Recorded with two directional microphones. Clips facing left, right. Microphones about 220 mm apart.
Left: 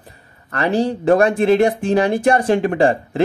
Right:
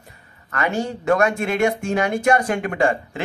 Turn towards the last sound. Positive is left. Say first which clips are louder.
# left 5 dB
turn(degrees=35)  # may be behind; listen again after turning